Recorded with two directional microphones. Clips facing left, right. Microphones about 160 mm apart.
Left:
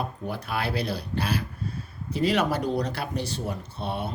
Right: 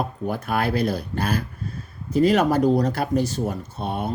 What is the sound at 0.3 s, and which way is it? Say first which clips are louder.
Speech: right 7 dB; 50° right (ahead or behind).